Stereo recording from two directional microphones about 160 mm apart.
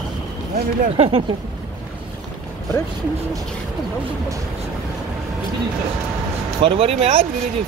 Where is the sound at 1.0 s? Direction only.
35° right (ahead or behind).